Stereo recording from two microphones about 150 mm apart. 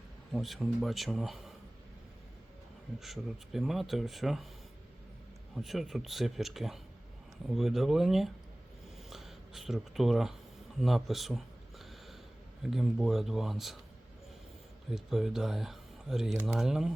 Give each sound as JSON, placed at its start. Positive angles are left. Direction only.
{"t": 0.3, "sound": "speech", "side_deg": 0}
{"t": 3.0, "sound": "speech", "side_deg": 0}
{"t": 5.5, "sound": "speech", "side_deg": 0}
{"t": 10.8, "sound": "a sound", "side_deg": 0}
{"t": 12.6, "sound": "speech", "side_deg": -5}
{"t": 14.8, "sound": "speech", "side_deg": -5}